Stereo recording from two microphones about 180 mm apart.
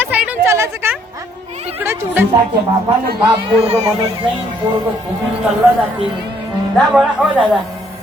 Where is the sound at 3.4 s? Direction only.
35° right (ahead or behind).